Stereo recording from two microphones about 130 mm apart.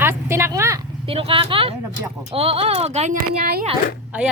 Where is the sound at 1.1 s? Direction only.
45° right (ahead or behind).